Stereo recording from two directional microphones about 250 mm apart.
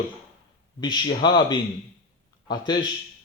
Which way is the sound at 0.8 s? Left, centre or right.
Centre.